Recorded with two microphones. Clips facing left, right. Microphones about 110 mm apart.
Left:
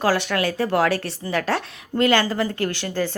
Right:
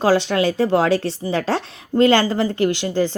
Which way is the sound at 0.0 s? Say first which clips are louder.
Right 4 dB; 20° right (ahead or behind).